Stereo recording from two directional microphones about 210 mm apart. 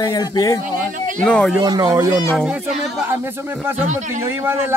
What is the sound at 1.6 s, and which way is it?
Speech, 20° right (ahead or behind).